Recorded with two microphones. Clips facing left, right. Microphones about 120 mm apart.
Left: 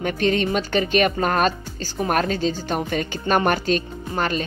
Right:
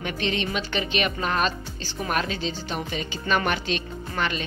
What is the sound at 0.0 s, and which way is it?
Speech, 45° left (ahead or behind).